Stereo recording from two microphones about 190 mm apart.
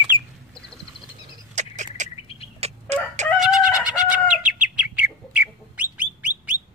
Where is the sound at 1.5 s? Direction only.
40° right (ahead or behind).